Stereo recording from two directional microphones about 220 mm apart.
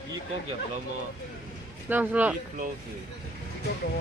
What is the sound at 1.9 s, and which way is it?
Speech, 10° right (ahead or behind).